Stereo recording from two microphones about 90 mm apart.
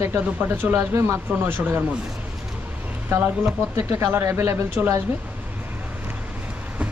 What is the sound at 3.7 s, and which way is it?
Speech, 25° right (ahead or behind).